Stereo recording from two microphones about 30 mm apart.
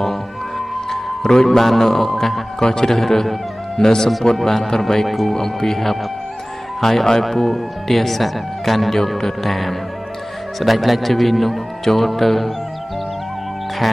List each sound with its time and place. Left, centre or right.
0.8 s music: centre
1.6 s speech: centre
2.6 s speech: centre
5.0 s speech: centre
5.3 s speech: centre